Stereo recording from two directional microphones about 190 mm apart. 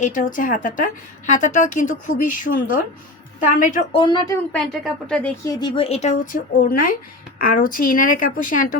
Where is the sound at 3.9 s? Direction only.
25° left (ahead or behind).